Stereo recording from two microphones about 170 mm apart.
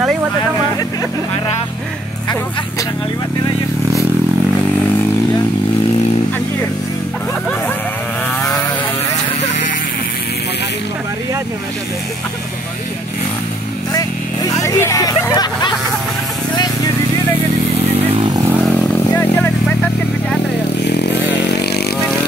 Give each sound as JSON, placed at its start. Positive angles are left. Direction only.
{"t": 8.4, "sound": "vehicle", "side_deg": 20}
{"t": 13.9, "sound": "hubbub", "side_deg": 20}
{"t": 18.1, "sound": "vehicle", "side_deg": -30}
{"t": 18.5, "sound": "vehicle", "side_deg": -10}
{"t": 19.0, "sound": "vehicle", "side_deg": 15}
{"t": 20.8, "sound": "motorcycle", "side_deg": 80}